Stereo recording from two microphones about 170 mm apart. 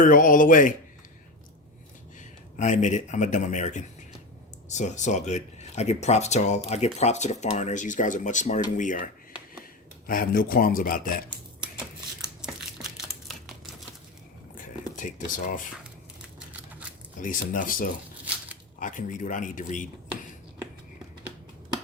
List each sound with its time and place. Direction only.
0.0 s speech: 50° left (ahead or behind)
2.1 s speech: 45° left (ahead or behind)
10.1 s speech: 55° left (ahead or behind)
14.5 s a sound: 50° left (ahead or behind)
17.2 s speech: 50° left (ahead or behind)